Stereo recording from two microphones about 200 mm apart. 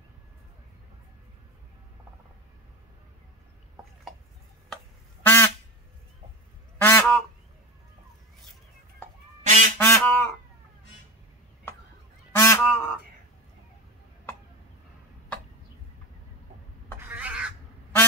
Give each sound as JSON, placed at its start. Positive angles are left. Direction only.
{"t": 5.2, "sound": "quack", "side_deg": 10}
{"t": 6.8, "sound": "goose", "side_deg": 10}
{"t": 9.0, "sound": "goose", "side_deg": 10}
{"t": 9.4, "sound": "goose", "side_deg": -40}
{"t": 9.8, "sound": "goose", "side_deg": 10}
{"t": 12.3, "sound": "goose", "side_deg": 10}
{"t": 17.1, "sound": "crow", "side_deg": -5}